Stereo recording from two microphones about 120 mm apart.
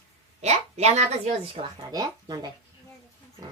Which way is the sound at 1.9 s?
35° right (ahead or behind).